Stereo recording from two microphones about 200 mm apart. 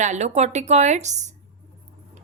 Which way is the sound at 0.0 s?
35° right (ahead or behind).